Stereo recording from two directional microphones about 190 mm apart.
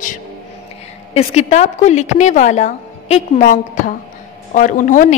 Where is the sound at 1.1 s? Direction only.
35° left (ahead or behind).